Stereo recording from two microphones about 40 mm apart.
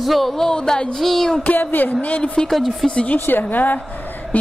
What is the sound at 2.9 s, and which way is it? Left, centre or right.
Speech, left.